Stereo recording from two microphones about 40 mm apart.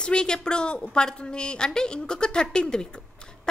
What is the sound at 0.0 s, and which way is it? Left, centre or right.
A woman's voice, left.